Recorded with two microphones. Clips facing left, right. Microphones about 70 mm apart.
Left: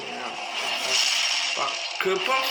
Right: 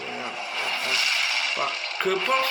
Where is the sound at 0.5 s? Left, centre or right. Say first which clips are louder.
Right 2 dB; right.